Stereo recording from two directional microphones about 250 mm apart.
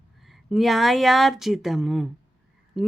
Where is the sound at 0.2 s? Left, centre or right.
Centre.